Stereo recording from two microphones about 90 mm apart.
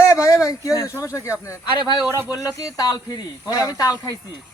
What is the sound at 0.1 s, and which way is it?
Speech, 35° left (ahead or behind).